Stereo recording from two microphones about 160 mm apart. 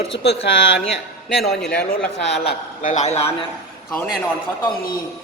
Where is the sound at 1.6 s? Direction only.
5° left (ahead or behind).